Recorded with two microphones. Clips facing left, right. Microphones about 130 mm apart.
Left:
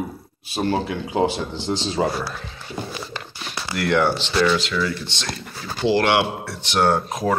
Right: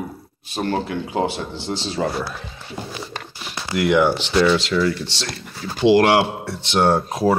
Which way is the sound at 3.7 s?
15° right (ahead or behind).